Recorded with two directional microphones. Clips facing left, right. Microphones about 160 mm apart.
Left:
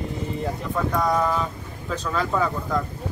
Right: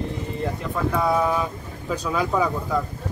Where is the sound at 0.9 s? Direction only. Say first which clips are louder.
Right 1 dB; 5° right (ahead or behind).